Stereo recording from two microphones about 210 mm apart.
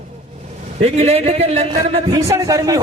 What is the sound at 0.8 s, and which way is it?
A man's voice, 30° right (ahead or behind).